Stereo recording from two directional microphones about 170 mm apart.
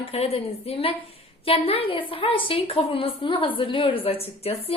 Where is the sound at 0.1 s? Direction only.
35° left (ahead or behind).